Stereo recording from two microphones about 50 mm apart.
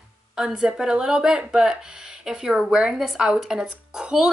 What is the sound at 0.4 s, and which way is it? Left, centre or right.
A woman's voice, centre.